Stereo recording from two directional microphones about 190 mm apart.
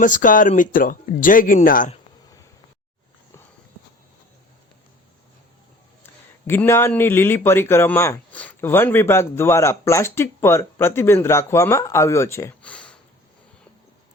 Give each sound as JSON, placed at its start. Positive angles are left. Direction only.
{"t": 0.0, "sound": "speech", "side_deg": 45}
{"t": 6.5, "sound": "a man's voice", "side_deg": 15}